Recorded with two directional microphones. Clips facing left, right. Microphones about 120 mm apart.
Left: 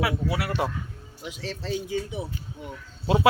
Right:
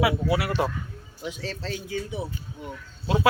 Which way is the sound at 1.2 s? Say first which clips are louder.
Right 1 dB; 10° left (ahead or behind).